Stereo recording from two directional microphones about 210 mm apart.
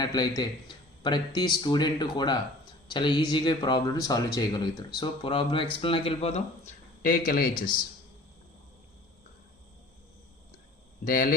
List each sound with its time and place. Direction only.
0.0 s speech: 20° left (ahead or behind); by 7.6 s 45° left (ahead or behind)
11.0 s speech: 45° left (ahead or behind)